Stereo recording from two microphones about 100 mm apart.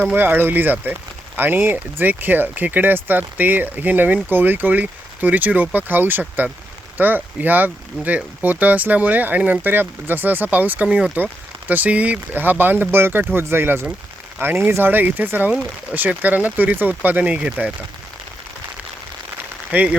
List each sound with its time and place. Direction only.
0.0 s speech: 15° right (ahead or behind)
19.7 s speech: 15° right (ahead or behind)